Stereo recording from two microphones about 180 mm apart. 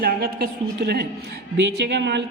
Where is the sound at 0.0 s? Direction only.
60° right (ahead or behind).